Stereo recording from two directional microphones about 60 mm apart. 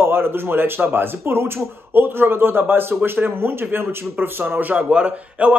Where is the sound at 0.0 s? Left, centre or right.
Right.